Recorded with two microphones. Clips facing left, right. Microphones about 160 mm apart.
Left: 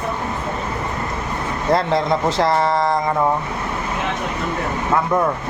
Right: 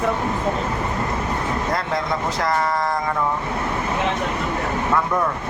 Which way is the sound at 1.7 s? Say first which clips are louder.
Left 6 dB; 30° left (ahead or behind).